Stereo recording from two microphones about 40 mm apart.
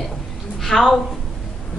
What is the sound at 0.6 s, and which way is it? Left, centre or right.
Speech, centre.